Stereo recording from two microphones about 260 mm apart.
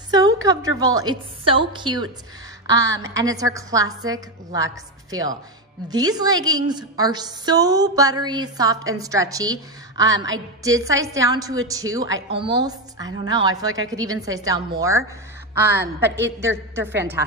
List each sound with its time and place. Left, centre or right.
0.1 s a woman's voice: centre
16.3 s a woman's voice: centre